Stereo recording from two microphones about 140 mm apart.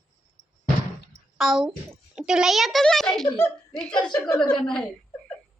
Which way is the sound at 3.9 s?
30° left (ahead or behind).